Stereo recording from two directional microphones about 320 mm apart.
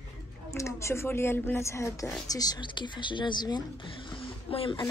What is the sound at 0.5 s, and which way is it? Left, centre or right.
Speech, centre.